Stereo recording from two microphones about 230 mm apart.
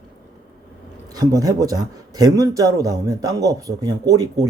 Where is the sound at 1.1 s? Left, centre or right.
Centre.